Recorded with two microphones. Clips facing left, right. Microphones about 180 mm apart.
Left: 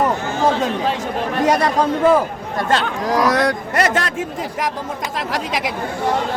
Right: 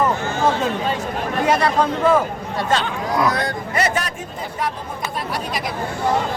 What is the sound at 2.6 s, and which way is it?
Speech, 75° left (ahead or behind).